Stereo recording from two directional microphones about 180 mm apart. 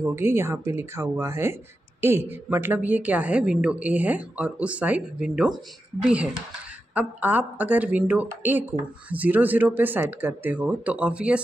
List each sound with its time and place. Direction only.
0.0 s speech: 15° right (ahead or behind)